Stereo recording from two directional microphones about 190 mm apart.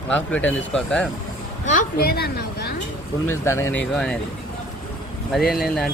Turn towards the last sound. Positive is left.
turn(degrees=0)  # may be behind; listen again after turning